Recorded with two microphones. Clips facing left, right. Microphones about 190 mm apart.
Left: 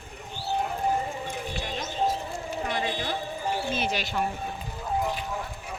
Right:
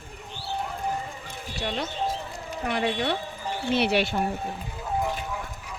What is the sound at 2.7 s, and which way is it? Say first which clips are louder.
A woman's voice: right 4 dB; 70° right (ahead or behind).